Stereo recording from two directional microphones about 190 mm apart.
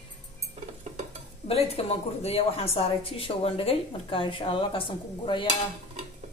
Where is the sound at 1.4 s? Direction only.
30° left (ahead or behind).